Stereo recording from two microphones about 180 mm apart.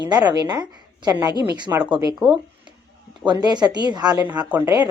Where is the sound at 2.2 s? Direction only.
Centre (ahead or behind).